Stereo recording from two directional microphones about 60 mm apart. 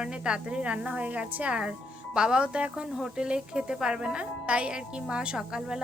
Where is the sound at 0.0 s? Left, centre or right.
Centre.